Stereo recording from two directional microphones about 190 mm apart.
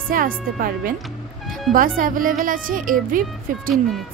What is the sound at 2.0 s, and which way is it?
A woman's voice, 45° right (ahead or behind).